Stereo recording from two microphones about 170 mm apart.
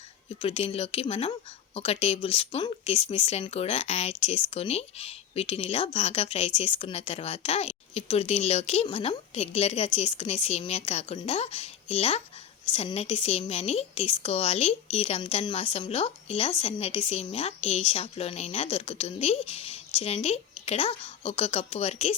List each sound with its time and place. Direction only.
0.3 s speech: 35° left (ahead or behind)